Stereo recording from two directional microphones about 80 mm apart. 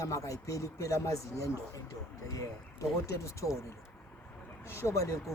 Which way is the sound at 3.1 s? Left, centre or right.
Left.